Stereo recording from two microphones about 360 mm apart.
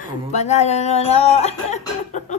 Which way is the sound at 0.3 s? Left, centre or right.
Centre.